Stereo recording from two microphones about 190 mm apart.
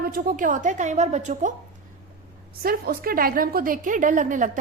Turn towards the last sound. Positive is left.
turn(degrees=-45)  # may be behind; listen again after turning